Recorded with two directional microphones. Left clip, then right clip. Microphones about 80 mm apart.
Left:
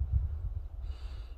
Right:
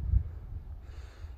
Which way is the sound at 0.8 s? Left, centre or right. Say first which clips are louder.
Even; left.